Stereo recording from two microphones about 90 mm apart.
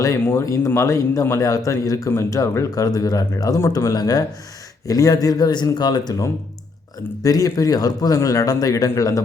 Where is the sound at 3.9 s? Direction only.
50° left (ahead or behind).